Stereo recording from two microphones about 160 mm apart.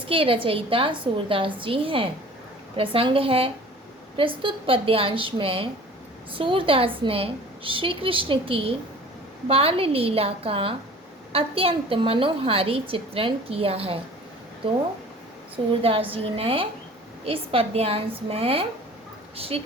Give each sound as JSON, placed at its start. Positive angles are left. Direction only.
{"t": 0.1, "sound": "a woman's voice", "side_deg": -35}
{"t": 15.8, "sound": "a woman's voice", "side_deg": -35}